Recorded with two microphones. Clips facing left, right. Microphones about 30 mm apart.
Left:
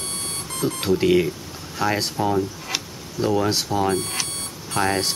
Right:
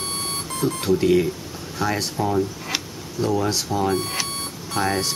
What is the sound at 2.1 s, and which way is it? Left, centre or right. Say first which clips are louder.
Speech: even; centre.